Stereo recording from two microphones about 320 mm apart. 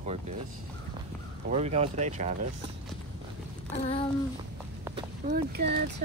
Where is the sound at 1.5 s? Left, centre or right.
Centre.